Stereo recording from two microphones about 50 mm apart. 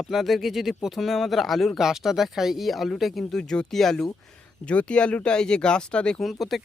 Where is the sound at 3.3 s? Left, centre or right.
Centre.